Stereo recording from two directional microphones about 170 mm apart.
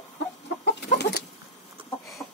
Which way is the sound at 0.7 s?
85° left.